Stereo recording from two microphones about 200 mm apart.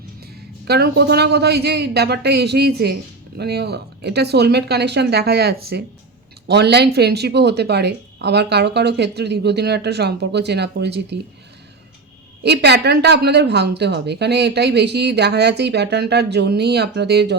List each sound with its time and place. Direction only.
0.7 s speech: 55° right (ahead or behind)
12.4 s speech: 55° right (ahead or behind)